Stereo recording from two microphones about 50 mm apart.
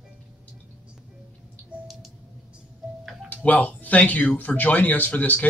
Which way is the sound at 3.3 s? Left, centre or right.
Left.